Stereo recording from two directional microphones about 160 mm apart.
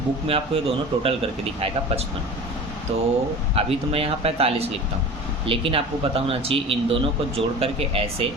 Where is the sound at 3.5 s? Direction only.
35° right (ahead or behind).